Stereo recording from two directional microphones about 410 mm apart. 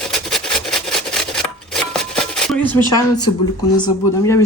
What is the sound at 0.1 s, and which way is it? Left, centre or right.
Filing, centre.